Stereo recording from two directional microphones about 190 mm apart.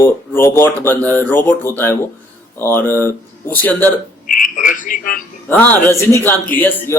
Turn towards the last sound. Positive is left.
turn(degrees=10)  # may be behind; listen again after turning